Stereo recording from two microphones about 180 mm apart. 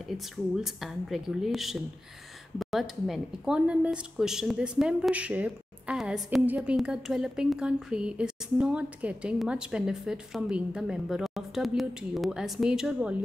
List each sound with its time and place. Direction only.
0.1 s speech: centre (ahead or behind)